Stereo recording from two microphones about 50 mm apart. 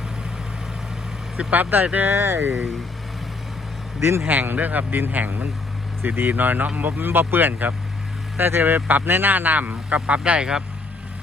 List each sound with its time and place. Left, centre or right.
1.5 s speech: right
2.0 s speech: right
4.3 s speech: right; by 10.6 s centre